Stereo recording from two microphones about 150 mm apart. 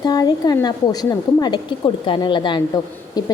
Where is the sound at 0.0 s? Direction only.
25° left (ahead or behind).